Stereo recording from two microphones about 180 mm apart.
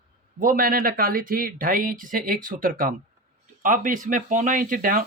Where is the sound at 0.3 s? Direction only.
50° right (ahead or behind).